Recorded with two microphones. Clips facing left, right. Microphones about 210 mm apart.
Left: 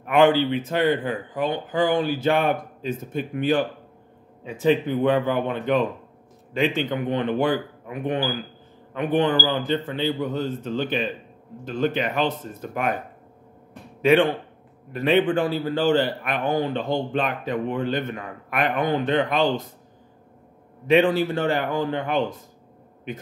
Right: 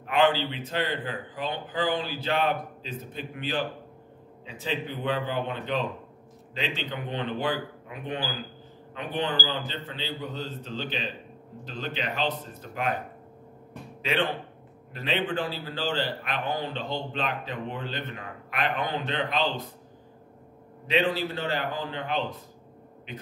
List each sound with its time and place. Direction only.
0.1 s speech: 50° left (ahead or behind)
14.0 s speech: 50° left (ahead or behind)
20.8 s speech: 50° left (ahead or behind)